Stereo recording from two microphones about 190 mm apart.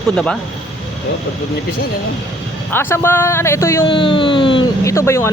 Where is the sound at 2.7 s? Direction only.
10° left (ahead or behind).